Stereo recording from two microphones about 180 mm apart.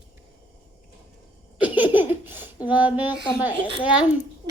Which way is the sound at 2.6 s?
10° right (ahead or behind).